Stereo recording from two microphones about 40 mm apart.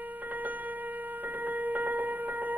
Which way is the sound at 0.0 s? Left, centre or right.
Right.